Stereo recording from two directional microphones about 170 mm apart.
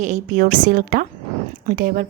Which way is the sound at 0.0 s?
50° right (ahead or behind).